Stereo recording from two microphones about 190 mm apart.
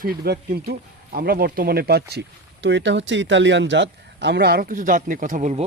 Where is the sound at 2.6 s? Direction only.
70° right (ahead or behind); by 5.6 s 40° right (ahead or behind).